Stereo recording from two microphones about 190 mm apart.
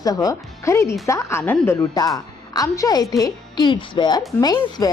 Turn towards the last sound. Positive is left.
turn(degrees=20)  # may be behind; listen again after turning